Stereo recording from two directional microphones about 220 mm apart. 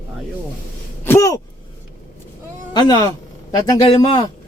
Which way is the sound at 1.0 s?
15° left (ahead or behind).